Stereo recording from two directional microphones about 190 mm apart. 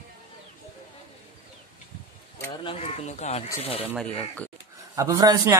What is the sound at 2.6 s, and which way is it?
Speech, 35° left (ahead or behind).